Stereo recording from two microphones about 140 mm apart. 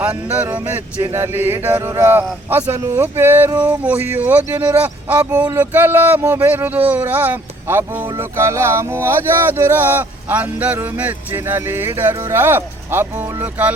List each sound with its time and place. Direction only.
0.3 s speech: 15° right (ahead or behind)